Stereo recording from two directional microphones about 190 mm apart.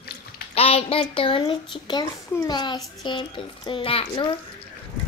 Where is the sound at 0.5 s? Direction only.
30° left (ahead or behind).